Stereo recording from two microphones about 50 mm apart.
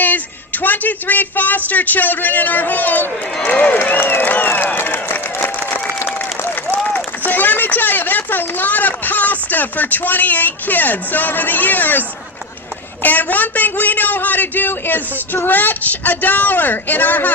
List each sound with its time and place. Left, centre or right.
0.0 s speech: left
3.8 s a sound: left
5.5 s applause: left
7.3 s speech: left